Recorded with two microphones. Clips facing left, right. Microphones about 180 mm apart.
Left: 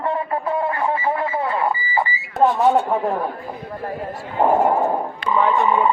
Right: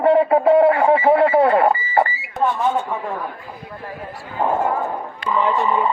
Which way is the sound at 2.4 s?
35° left (ahead or behind).